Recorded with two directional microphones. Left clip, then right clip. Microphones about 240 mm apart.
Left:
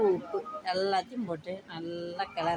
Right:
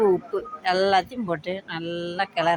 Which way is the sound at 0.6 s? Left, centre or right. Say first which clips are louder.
Right 10 dB; right.